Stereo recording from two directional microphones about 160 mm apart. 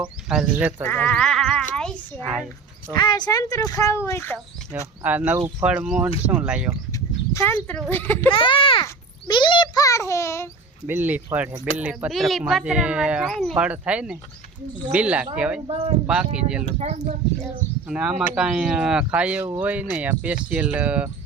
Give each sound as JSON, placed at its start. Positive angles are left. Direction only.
{"t": 0.3, "sound": "speech", "side_deg": -5}
{"t": 0.9, "sound": "bleat", "side_deg": 10}
{"t": 1.7, "sound": "a sound", "side_deg": 5}
{"t": 2.2, "sound": "speech", "side_deg": -5}
{"t": 2.9, "sound": "speech", "side_deg": 25}
{"t": 5.0, "sound": "speech", "side_deg": -10}
{"t": 7.3, "sound": "speech", "side_deg": 15}
{"t": 8.3, "sound": "speech", "side_deg": 30}
{"t": 8.8, "sound": "a sound", "side_deg": 30}
{"t": 10.8, "sound": "speech", "side_deg": -10}
{"t": 15.6, "sound": "speech", "side_deg": -35}
{"t": 16.0, "sound": "speech", "side_deg": -5}
{"t": 16.7, "sound": "speech", "side_deg": -45}
{"t": 17.8, "sound": "speech", "side_deg": -5}